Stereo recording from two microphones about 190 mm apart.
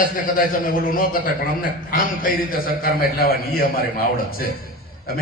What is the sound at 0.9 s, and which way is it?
A man's voice, 45° left (ahead or behind).